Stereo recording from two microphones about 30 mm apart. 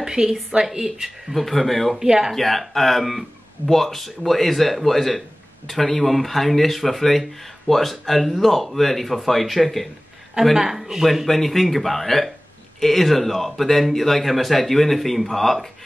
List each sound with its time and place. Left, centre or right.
0.0 s a woman's voice: centre
1.3 s speech: centre
2.0 s speech: centre
2.3 s speech: centre
10.5 s speech: centre
11.2 s speech: centre